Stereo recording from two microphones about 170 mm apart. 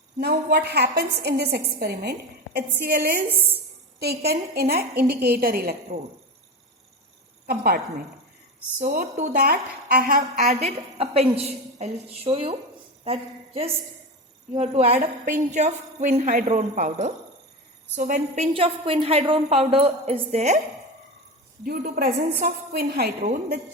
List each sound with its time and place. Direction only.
0.2 s a woman's voice: 70° right (ahead or behind)
3.2 s a woman's voice: 10° right (ahead or behind)
4.0 s a woman's voice: 70° right (ahead or behind)
7.4 s a woman's voice: 60° right (ahead or behind)
8.8 s a woman's voice: 50° right (ahead or behind)
9.4 s a woman's voice: 65° right (ahead or behind); by 20.6 s 40° right (ahead or behind)
21.6 s a woman's voice: 60° right (ahead or behind)